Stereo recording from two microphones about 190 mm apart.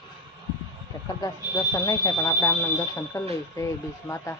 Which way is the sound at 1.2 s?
20° left (ahead or behind).